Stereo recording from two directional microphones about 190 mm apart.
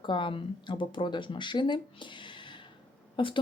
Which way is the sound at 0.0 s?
25° left (ahead or behind).